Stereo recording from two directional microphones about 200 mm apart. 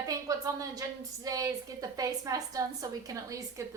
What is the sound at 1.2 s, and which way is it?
A woman's voice, 15° right (ahead or behind).